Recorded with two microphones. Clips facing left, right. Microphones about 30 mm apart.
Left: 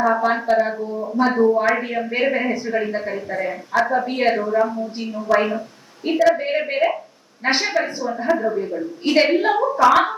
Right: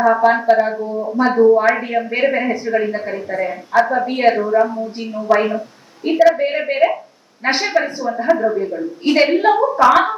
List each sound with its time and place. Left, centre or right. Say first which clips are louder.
0.0 s a woman's voice: right 5 dB; centre